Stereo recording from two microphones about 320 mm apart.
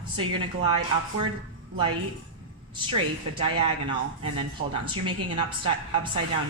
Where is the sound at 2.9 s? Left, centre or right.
Centre.